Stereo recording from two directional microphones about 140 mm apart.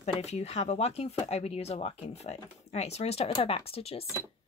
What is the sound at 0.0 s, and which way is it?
Speech, 50° left (ahead or behind).